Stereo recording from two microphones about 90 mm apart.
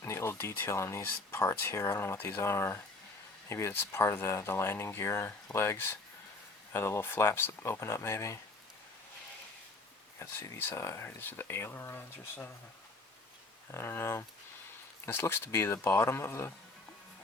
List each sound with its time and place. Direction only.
0.0 s speech: 30° left (ahead or behind)
10.2 s speech: 25° left (ahead or behind)
13.7 s speech: 25° left (ahead or behind)